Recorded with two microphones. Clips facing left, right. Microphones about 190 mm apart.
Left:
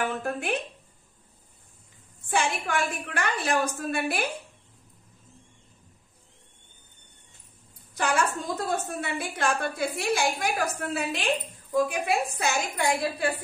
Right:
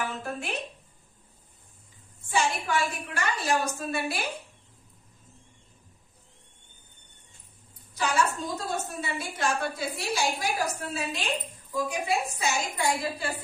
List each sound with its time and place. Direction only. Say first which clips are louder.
0.0 s a woman's voice: left 4 dB; 55° left (ahead or behind)
2.2 s a woman's voice: even; 55° left (ahead or behind)
7.9 s a woman's voice: left 1 dB; 55° left (ahead or behind)